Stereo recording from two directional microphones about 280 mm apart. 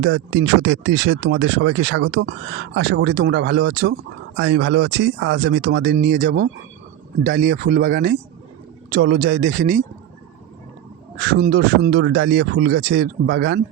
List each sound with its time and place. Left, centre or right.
0.0 s speech: right
11.2 s speech: right